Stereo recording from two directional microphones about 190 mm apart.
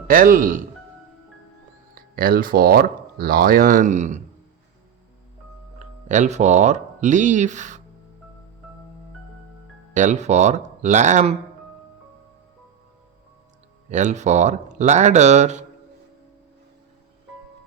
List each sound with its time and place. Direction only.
0.1 s speech: 45° right (ahead or behind)
2.0 s speech: 50° right (ahead or behind)
5.8 s speech: 40° right (ahead or behind)
9.9 s speech: 40° right (ahead or behind)
13.9 s speech: 40° right (ahead or behind)